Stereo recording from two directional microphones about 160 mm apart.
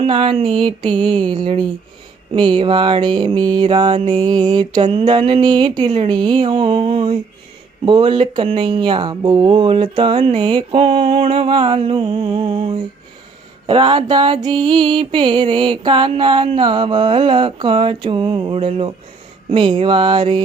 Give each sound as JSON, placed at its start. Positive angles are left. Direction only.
{"t": 0.0, "sound": "mantra", "side_deg": -35}